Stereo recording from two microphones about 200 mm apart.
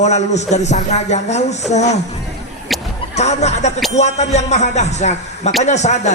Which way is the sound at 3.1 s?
35° left (ahead or behind).